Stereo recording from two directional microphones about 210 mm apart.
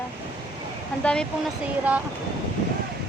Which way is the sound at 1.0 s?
5° left (ahead or behind).